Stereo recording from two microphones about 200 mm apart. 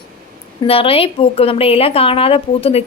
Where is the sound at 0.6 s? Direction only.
30° left (ahead or behind).